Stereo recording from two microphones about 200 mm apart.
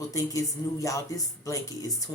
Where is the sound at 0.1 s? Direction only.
15° left (ahead or behind).